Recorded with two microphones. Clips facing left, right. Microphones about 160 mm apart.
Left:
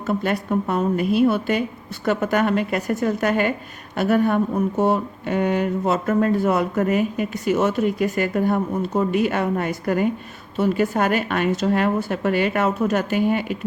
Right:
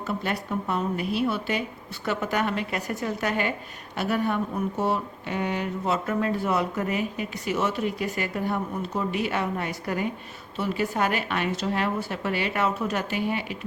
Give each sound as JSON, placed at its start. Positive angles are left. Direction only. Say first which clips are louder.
{"t": 0.1, "sound": "speech", "louder": "left 7 dB", "side_deg": 50}